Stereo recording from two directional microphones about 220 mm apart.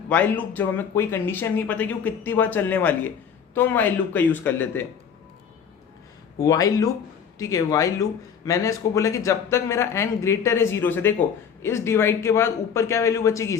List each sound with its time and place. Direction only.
0.1 s speech: 5° left (ahead or behind)
6.4 s speech: 15° left (ahead or behind)